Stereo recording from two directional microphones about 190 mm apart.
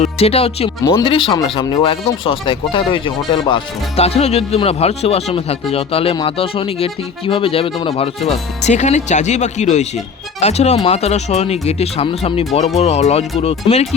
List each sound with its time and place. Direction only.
0.0 s speech: 30° left (ahead or behind)